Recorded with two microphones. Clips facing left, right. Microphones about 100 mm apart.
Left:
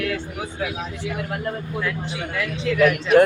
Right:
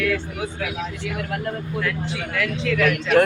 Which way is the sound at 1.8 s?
15° left (ahead or behind).